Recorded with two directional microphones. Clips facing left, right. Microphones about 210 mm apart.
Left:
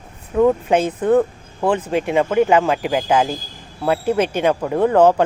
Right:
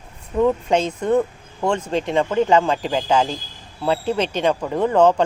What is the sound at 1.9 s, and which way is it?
Speech, 10° left (ahead or behind).